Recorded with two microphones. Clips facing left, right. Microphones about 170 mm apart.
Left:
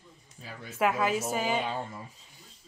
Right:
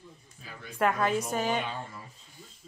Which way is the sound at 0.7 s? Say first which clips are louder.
Even; 5° left (ahead or behind).